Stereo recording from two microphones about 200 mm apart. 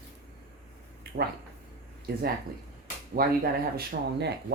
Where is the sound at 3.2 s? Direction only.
50° right (ahead or behind).